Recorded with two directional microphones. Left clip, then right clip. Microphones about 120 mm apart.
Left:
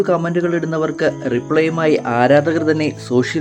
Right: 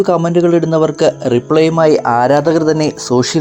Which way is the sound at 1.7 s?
15° right (ahead or behind).